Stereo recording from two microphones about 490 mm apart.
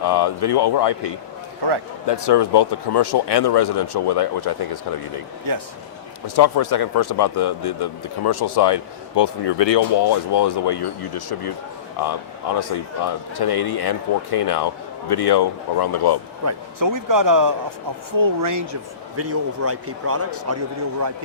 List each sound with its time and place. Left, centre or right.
0.0 s speech: left
5.5 s a man's voice: right
6.2 s speech: left
16.4 s a man's voice: right